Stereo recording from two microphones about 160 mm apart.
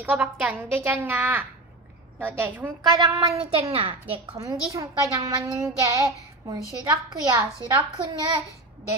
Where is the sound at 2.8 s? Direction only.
25° right (ahead or behind).